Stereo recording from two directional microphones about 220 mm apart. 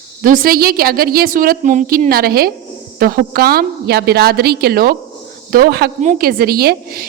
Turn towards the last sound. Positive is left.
turn(degrees=-45)  # may be behind; listen again after turning